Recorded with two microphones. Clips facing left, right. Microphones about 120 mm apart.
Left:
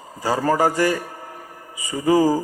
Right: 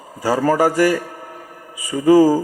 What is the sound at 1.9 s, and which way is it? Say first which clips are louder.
Speech: right 6 dB; 35° right (ahead or behind).